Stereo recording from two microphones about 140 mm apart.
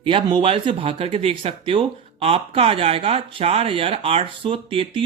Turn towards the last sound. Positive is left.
turn(degrees=-40)  # may be behind; listen again after turning